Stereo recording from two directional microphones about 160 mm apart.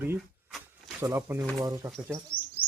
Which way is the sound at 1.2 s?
15° right (ahead or behind).